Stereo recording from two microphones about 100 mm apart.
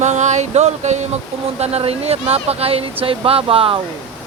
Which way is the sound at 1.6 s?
90° right.